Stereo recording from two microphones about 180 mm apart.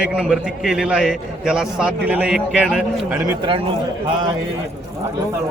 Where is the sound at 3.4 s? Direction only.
30° right (ahead or behind).